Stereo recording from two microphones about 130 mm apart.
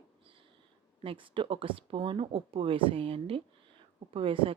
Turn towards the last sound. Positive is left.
turn(degrees=-45)  # may be behind; listen again after turning